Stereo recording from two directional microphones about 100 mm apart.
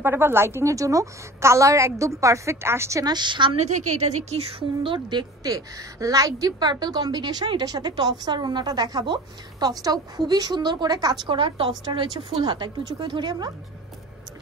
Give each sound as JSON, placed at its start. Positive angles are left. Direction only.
{"t": 0.0, "sound": "a woman's voice", "side_deg": -25}
{"t": 3.1, "sound": "speech", "side_deg": -50}
{"t": 4.3, "sound": "speech", "side_deg": -80}
{"t": 5.4, "sound": "a woman's voice", "side_deg": -35}
{"t": 11.2, "sound": "a woman's voice", "side_deg": -55}